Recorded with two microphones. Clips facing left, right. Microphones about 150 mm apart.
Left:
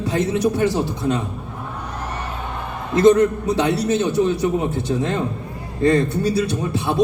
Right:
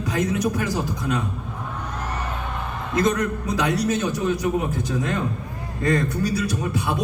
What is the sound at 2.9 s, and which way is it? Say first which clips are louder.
A man's voice: left 9 dB; 30° left (ahead or behind).